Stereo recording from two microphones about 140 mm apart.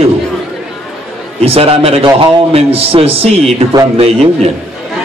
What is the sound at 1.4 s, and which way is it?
A man's voice, 45° right (ahead or behind).